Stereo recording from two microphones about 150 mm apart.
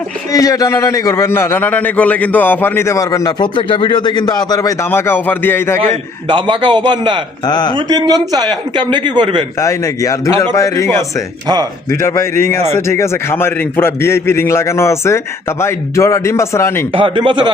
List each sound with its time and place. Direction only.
0.3 s a man's voice: 25° left (ahead or behind)
5.8 s speech: 35° right (ahead or behind)
7.4 s a man's voice: 30° left (ahead or behind)
7.8 s speech: 30° right (ahead or behind)
9.6 s a man's voice: 20° left (ahead or behind)
12.0 s a man's voice: 20° left (ahead or behind)
16.9 s speech: 35° right (ahead or behind)